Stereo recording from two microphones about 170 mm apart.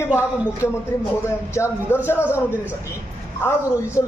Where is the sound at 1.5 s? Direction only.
15° left (ahead or behind).